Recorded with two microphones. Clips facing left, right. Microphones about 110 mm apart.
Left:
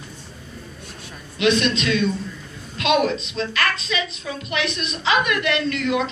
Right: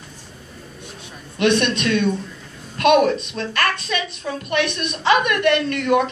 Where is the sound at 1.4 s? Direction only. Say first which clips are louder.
Right 1 dB; 55° right (ahead or behind).